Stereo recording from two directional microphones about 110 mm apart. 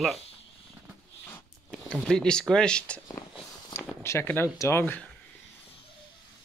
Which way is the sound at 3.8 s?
25° left (ahead or behind).